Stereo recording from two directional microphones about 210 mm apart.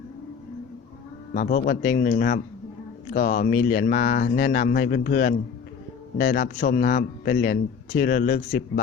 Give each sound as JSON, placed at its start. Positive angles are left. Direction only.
{"t": 1.3, "sound": "a man's voice", "side_deg": 40}